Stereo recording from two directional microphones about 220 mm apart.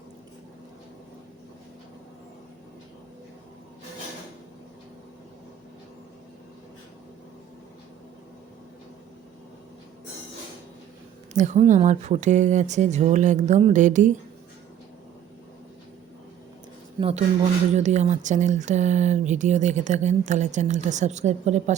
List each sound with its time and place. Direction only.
11.3 s speech: 35° right (ahead or behind)
17.0 s speech: 25° right (ahead or behind)